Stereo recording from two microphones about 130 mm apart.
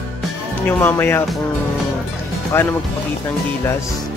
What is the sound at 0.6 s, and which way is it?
Speech, 15° left (ahead or behind).